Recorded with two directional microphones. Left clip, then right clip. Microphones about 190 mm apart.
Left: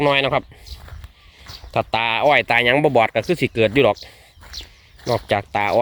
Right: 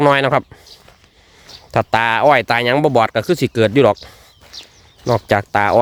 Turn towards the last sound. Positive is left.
turn(degrees=-40)  # may be behind; listen again after turning